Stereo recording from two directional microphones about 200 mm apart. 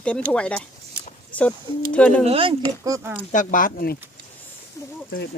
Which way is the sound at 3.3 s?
45° left (ahead or behind).